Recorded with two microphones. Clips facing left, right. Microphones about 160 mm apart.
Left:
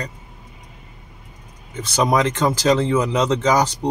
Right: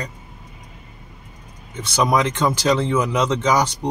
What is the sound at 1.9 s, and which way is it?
Speech, 40° left (ahead or behind).